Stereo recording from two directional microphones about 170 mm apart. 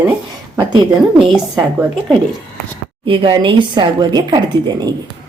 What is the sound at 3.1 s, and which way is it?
Speech, 30° right (ahead or behind).